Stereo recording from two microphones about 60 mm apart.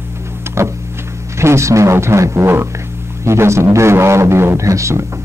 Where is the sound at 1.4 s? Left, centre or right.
Right.